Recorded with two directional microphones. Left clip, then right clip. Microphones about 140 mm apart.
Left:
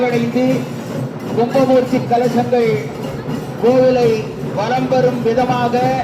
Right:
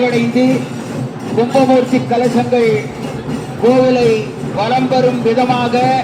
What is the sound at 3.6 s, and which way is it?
Speech, 25° left (ahead or behind).